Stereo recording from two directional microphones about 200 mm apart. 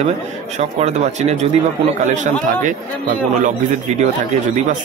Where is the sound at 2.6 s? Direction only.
40° right (ahead or behind).